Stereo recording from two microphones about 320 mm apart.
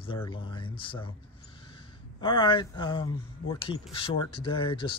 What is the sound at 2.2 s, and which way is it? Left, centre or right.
Speech, centre.